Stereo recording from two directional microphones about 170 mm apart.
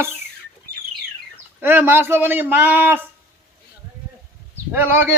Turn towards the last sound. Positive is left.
turn(degrees=-10)  # may be behind; listen again after turning